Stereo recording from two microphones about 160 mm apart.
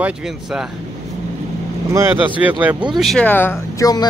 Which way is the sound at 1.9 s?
15° right (ahead or behind).